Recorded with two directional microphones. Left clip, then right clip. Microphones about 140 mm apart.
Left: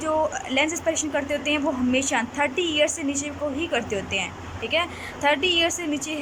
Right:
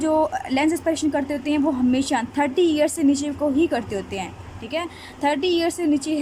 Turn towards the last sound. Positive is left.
turn(degrees=-35)  # may be behind; listen again after turning